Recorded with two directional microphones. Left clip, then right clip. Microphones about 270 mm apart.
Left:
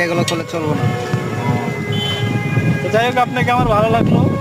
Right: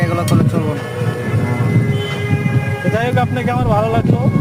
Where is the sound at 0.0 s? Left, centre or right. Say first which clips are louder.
Left 2 dB; centre.